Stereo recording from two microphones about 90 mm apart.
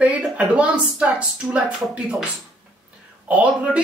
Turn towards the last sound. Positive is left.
turn(degrees=-15)  # may be behind; listen again after turning